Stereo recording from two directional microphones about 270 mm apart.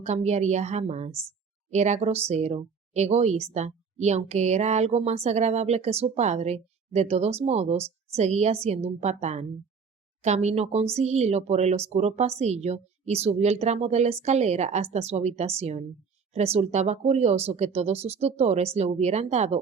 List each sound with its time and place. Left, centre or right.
0.0 s speech: right